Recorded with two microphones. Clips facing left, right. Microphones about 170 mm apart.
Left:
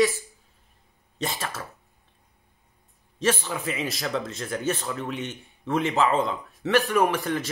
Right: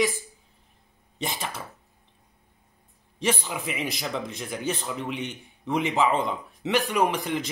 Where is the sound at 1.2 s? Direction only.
15° right (ahead or behind).